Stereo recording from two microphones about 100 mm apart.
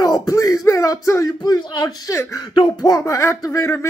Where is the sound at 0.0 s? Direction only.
35° left (ahead or behind).